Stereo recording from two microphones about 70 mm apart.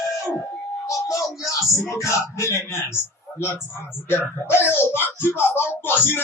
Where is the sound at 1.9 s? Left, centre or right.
Left.